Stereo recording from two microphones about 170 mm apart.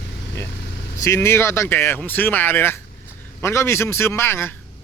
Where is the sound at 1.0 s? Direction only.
15° left (ahead or behind).